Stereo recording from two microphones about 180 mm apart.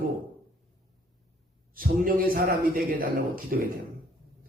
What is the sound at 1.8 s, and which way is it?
A man's voice, 50° right (ahead or behind).